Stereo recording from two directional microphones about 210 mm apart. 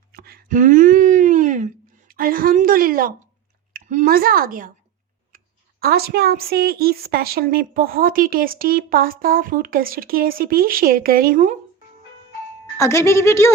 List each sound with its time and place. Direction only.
0.1 s a sound: 45° right (ahead or behind)
3.7 s speech: 40° right (ahead or behind)
5.8 s speech: 50° right (ahead or behind)
12.7 s a woman's voice: 15° left (ahead or behind)